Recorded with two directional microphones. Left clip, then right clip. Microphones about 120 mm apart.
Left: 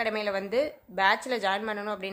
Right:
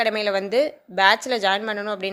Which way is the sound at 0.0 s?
30° right (ahead or behind).